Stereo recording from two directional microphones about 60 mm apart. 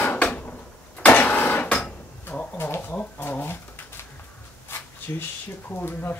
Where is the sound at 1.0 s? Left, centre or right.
Left.